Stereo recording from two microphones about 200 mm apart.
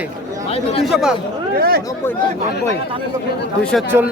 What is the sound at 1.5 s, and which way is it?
Speech, 50° right (ahead or behind).